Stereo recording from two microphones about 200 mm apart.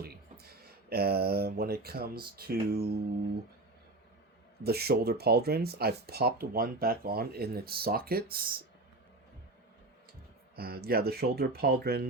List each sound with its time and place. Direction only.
0.0 s speech: 50° right (ahead or behind)
4.6 s speech: 50° right (ahead or behind)
10.5 s speech: 50° right (ahead or behind)